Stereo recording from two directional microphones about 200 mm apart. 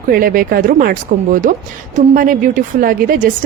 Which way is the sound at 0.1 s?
45° right (ahead or behind).